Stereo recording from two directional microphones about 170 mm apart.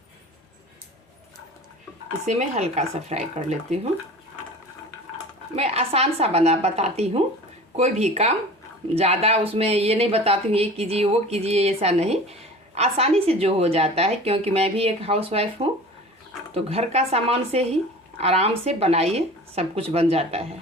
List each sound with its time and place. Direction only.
2.2 s speech: 40° right (ahead or behind)
5.5 s speech: 35° right (ahead or behind)